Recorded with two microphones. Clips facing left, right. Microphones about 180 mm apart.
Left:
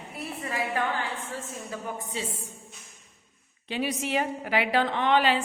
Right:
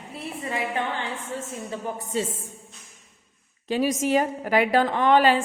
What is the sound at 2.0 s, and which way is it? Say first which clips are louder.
Speech: right 7 dB; 45° right (ahead or behind).